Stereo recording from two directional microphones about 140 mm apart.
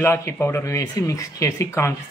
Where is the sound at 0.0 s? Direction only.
15° left (ahead or behind).